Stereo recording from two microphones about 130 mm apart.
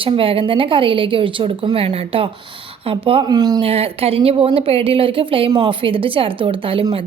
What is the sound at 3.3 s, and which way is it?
Speech, 30° right (ahead or behind).